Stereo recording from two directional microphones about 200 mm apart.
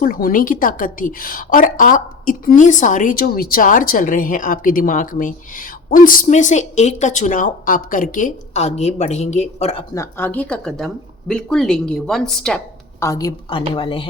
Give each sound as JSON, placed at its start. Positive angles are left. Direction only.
{"t": 0.0, "sound": "a woman's voice", "side_deg": 45}
{"t": 9.9, "sound": "speech", "side_deg": 15}